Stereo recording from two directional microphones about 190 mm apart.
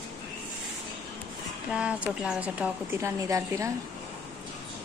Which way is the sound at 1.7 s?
5° right (ahead or behind).